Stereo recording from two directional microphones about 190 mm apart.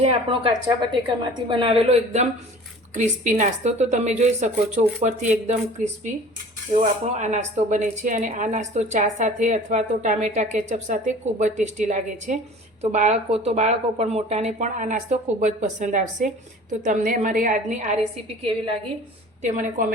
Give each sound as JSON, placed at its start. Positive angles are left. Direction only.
{"t": 0.0, "sound": "a woman's voice", "side_deg": -30}
{"t": 19.4, "sound": "a woman's voice", "side_deg": -40}